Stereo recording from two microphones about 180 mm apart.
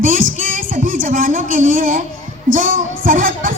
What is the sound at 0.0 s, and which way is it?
Music, 50° right (ahead or behind).